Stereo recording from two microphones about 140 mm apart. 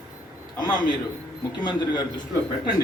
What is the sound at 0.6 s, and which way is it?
A man's voice, 30° left (ahead or behind).